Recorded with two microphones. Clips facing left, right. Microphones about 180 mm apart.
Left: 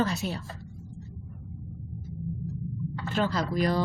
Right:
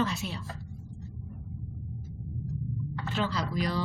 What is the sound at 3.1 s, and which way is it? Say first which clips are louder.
Speech: left 4 dB; 45° left (ahead or behind).